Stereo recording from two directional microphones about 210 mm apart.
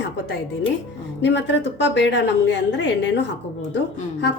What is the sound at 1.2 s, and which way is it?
A woman's voice, 55° left (ahead or behind).